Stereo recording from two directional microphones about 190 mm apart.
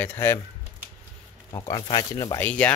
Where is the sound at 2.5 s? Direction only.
5° left (ahead or behind).